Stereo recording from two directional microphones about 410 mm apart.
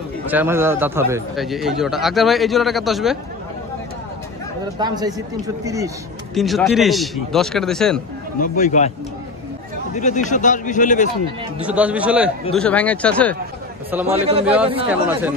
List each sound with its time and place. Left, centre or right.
0.3 s a man's voice: centre
4.7 s a man's voice: centre
8.4 s a man's voice: centre
9.9 s a man's voice: centre
11.6 s a man's voice: centre
14.0 s speech: centre
14.4 s a man's voice: centre